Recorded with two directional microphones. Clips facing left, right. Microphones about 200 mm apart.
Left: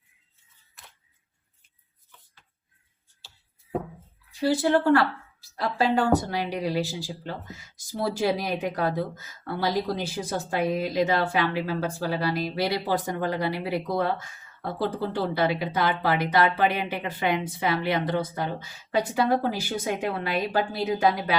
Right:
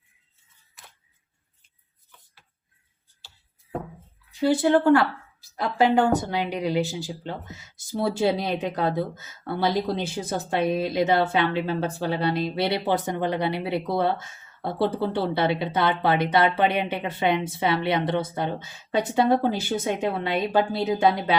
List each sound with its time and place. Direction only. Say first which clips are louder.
3.2 s chopping: right 1 dB; centre (ahead or behind)
4.4 s speech: right 2 dB; 20° right (ahead or behind)